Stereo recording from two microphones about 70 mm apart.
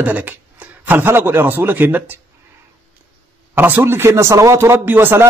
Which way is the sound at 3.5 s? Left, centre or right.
Right.